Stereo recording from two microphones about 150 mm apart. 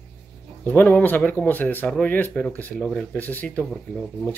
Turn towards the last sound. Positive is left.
turn(degrees=0)  # may be behind; listen again after turning